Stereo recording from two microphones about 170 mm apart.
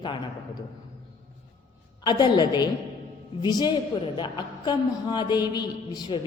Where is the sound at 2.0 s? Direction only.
25° left (ahead or behind).